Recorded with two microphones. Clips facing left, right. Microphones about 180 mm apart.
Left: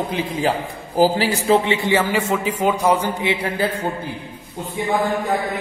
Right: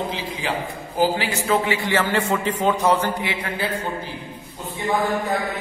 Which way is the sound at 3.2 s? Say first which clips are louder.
Left 6 dB; 25° left (ahead or behind).